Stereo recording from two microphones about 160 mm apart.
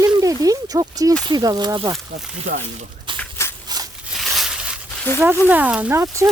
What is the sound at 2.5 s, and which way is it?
Speech, 60° right (ahead or behind).